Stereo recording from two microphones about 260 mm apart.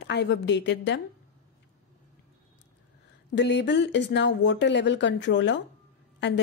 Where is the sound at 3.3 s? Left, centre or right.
Left.